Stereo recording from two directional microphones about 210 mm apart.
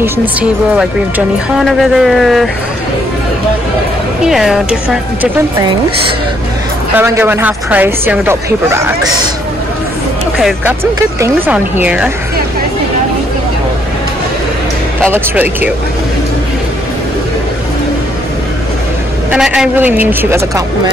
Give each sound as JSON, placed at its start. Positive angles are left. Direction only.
{"t": 0.0, "sound": "speech", "side_deg": -10}
{"t": 4.2, "sound": "speech", "side_deg": 0}
{"t": 7.0, "sound": "speech", "side_deg": -10}
{"t": 10.3, "sound": "speech", "side_deg": -5}
{"t": 15.0, "sound": "speech", "side_deg": -10}
{"t": 19.3, "sound": "speech", "side_deg": -5}